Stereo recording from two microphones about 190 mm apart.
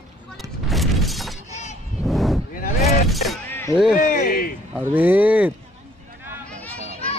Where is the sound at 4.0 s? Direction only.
45° left (ahead or behind).